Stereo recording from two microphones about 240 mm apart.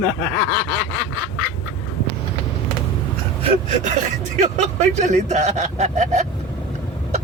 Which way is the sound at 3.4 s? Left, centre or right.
Right.